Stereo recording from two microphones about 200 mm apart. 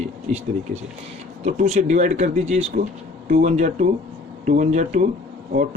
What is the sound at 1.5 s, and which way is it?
Speech, 35° right (ahead or behind).